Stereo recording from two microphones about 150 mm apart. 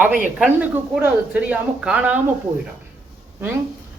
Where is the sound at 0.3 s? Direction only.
10° right (ahead or behind).